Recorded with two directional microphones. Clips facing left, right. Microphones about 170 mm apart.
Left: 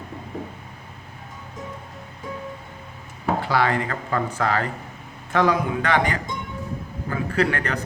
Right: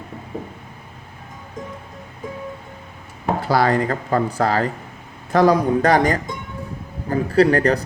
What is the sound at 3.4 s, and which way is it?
Speech, 40° right (ahead or behind).